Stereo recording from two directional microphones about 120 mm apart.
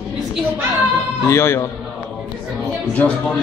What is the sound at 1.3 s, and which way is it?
Speech, 20° left (ahead or behind).